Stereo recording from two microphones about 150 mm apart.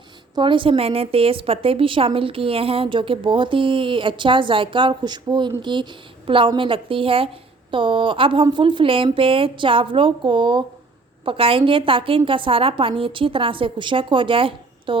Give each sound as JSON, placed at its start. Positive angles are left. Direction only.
{"t": 0.3, "sound": "a woman's voice", "side_deg": -35}